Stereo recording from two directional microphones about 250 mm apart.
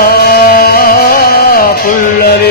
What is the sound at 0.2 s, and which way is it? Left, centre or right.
Music, left.